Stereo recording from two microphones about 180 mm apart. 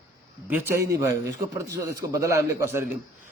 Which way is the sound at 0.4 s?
10° right (ahead or behind).